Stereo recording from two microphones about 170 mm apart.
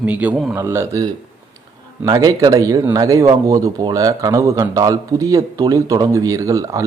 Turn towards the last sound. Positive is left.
turn(degrees=-20)  # may be behind; listen again after turning